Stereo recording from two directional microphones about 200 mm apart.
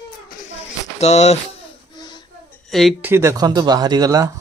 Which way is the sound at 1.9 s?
20° left (ahead or behind).